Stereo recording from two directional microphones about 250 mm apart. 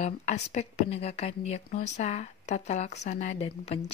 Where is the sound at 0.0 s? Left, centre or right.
Left.